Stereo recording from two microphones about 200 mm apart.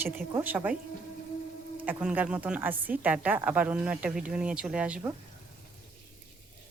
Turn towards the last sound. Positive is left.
turn(degrees=-5)  # may be behind; listen again after turning